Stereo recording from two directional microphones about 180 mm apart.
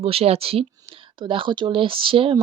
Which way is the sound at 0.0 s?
35° right (ahead or behind).